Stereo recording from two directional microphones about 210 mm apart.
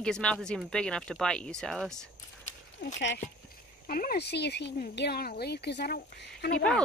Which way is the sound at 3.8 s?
45° left (ahead or behind).